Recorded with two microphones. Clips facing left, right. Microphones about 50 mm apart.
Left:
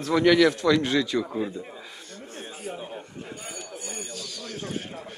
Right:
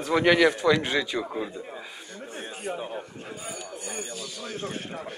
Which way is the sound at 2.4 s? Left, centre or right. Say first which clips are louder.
Right 3 dB; right.